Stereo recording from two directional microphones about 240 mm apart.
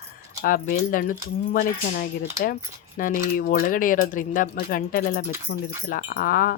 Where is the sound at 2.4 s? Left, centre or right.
Left.